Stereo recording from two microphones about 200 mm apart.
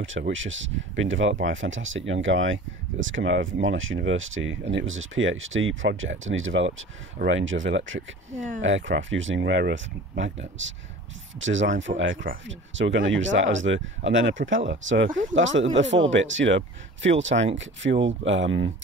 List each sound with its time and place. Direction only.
0.3 s speech: 70° right (ahead or behind)